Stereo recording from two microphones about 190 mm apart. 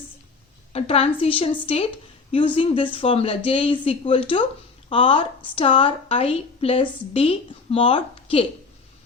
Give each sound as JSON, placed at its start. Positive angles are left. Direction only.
{"t": 0.7, "sound": "a woman's voice", "side_deg": 30}